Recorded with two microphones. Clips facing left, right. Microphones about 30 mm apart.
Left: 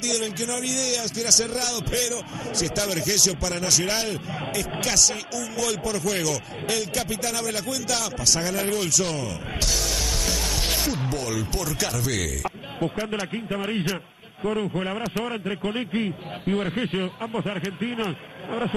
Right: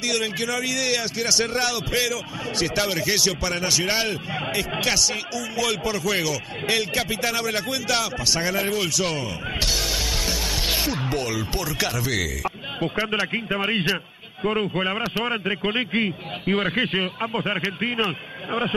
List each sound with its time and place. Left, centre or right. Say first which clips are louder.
0.4 s a man's voice: right 3 dB; centre
5.6 s a man's voice: right 2 dB; centre
6.7 s a man's voice: right 3 dB; right
10.2 s music: right 1 dB; centre
11.8 s a man's voice: right 3 dB; centre
12.8 s a man's voice: right 3 dB; right
14.4 s a man's voice: right 3 dB; centre